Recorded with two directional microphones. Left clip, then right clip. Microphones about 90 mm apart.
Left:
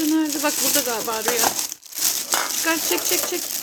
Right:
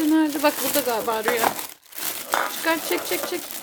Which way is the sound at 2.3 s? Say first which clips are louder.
Right 2 dB; 10° right (ahead or behind).